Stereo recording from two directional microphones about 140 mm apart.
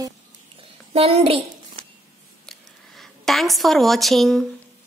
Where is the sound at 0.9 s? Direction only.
45° right (ahead or behind).